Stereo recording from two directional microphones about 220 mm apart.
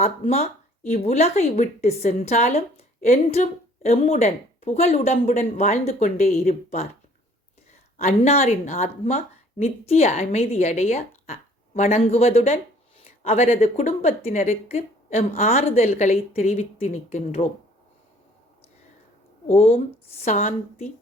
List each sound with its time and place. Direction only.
0.0 s a sound: 30° left (ahead or behind)
1.0 s a woman's voice: 30° left (ahead or behind)
7.9 s a woman's voice: 30° left (ahead or behind)
19.5 s a woman's voice: 30° left (ahead or behind)